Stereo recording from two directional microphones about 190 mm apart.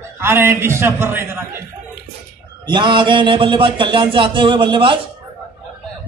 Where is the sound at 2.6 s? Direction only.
25° right (ahead or behind).